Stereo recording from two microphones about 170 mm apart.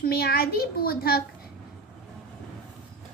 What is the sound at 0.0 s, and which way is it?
A child's voice, 65° left (ahead or behind).